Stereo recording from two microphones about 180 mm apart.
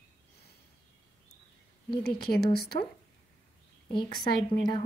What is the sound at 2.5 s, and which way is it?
Speech, 60° left (ahead or behind).